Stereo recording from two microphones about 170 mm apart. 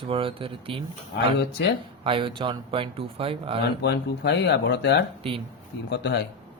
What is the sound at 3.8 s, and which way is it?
A man's voice, 90° left.